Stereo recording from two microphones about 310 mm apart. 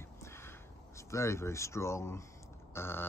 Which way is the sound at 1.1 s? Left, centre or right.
Centre.